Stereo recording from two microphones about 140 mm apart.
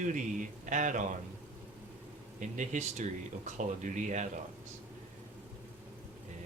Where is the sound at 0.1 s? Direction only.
65° right (ahead or behind).